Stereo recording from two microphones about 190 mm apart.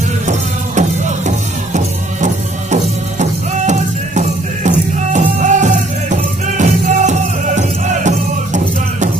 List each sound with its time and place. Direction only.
0.3 s music: 40° right (ahead or behind)